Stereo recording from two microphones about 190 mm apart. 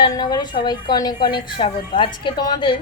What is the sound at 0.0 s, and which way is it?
A woman's voice, 20° left (ahead or behind).